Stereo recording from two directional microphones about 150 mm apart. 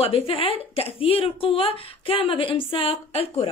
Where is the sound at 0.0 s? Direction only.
40° left (ahead or behind).